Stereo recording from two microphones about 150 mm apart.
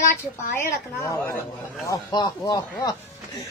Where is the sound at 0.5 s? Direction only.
20° left (ahead or behind).